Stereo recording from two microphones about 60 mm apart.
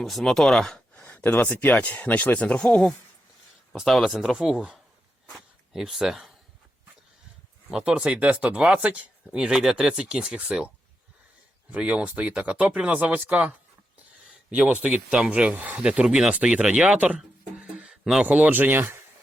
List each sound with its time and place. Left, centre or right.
0.0 s speech: centre
0.9 s a sound: left
1.5 s speech: left
3.8 s speech: centre
5.3 s a sound: centre
7.7 s speech: centre
11.7 s speech: centre
14.8 s speech: right
17.6 s a sound: centre
18.3 s speech: right